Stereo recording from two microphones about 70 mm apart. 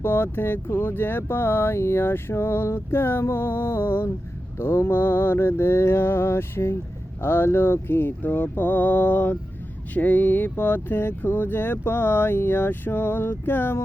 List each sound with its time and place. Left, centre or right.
0.0 s speech: left